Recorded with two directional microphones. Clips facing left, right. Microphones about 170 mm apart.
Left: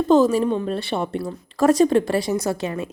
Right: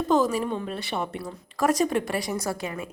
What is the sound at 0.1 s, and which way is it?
Speech, 25° left (ahead or behind).